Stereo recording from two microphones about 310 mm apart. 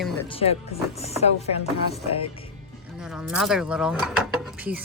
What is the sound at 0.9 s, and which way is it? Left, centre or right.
Chopping, centre.